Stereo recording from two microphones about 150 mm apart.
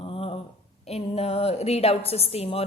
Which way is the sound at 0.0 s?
40° left (ahead or behind).